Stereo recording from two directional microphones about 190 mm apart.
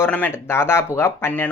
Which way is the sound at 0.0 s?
10° left (ahead or behind).